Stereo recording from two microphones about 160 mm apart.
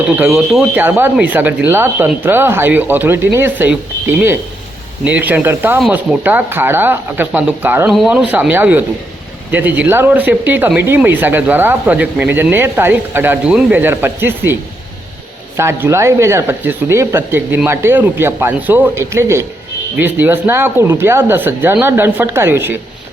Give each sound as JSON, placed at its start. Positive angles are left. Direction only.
{"t": 0.2, "sound": "speech", "side_deg": -5}
{"t": 15.5, "sound": "speech", "side_deg": -15}